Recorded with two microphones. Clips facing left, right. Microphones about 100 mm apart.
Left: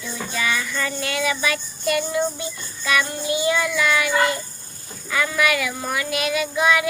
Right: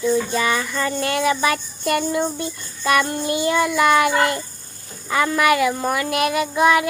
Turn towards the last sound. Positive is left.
turn(degrees=-50)  # may be behind; listen again after turning